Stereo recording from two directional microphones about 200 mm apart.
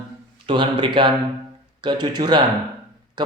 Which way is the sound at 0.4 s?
25° right (ahead or behind).